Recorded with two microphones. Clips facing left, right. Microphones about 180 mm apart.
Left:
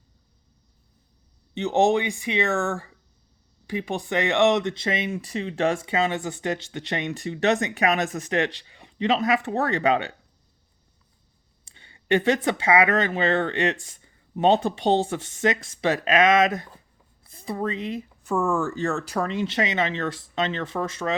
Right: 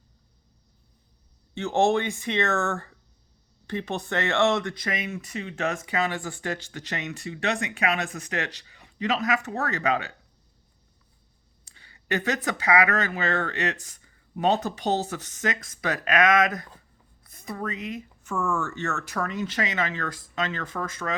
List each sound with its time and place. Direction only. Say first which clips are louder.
1.5 s speech: left 2 dB; 20° left (ahead or behind)
11.6 s speech: left 3 dB; 25° left (ahead or behind)